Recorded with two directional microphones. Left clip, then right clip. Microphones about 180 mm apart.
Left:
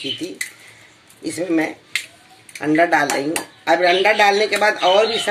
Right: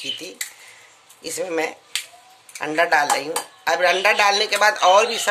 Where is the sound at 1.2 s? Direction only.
65° right (ahead or behind).